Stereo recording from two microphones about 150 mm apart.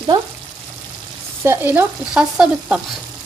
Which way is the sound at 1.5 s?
10° right (ahead or behind).